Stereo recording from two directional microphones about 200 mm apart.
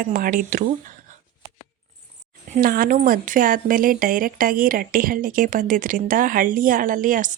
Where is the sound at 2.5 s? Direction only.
45° right (ahead or behind).